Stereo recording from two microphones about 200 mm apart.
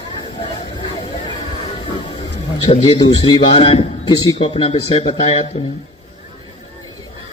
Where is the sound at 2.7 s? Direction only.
25° left (ahead or behind).